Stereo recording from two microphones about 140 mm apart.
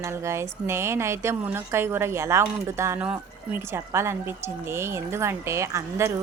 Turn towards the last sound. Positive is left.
turn(degrees=-20)  # may be behind; listen again after turning